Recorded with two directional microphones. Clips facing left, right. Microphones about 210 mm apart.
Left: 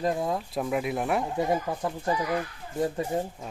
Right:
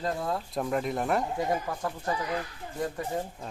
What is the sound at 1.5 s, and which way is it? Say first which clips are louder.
Speech: left 3 dB; 20° left (ahead or behind).